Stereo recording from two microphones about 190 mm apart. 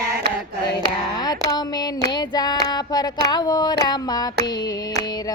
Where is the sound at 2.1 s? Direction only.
20° left (ahead or behind).